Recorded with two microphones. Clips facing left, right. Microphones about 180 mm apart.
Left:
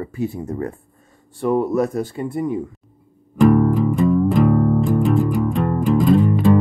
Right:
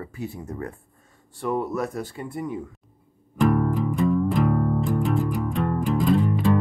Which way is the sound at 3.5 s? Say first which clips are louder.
Left 7 dB; 90° left.